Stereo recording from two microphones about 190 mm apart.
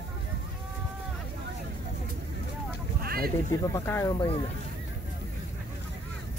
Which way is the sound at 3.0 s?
55° right (ahead or behind).